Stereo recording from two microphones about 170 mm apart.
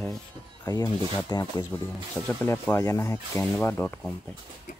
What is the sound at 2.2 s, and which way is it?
Speech, 10° left (ahead or behind).